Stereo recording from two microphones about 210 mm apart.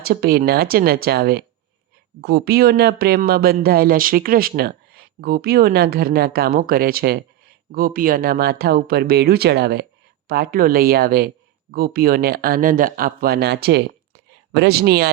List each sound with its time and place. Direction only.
0.0 s speech: 45° right (ahead or behind)